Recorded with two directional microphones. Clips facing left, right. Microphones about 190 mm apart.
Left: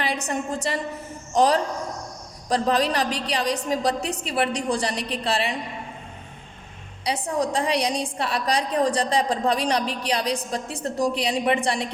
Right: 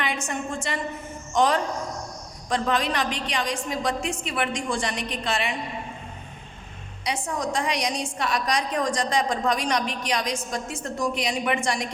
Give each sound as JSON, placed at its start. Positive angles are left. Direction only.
{"t": 0.0, "sound": "a woman's voice", "side_deg": 35}
{"t": 7.0, "sound": "a woman's voice", "side_deg": 35}